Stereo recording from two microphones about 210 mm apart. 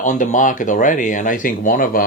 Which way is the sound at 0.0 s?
35° left (ahead or behind).